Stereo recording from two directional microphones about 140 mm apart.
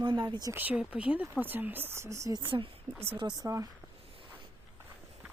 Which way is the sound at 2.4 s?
40° right (ahead or behind).